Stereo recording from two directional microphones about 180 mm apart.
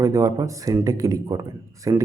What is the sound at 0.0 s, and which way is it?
A man's voice, 20° right (ahead or behind).